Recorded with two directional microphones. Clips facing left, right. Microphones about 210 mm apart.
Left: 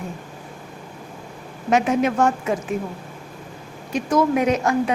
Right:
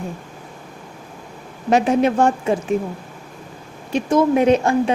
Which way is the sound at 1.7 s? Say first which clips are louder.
Right 3 dB; 30° right (ahead or behind).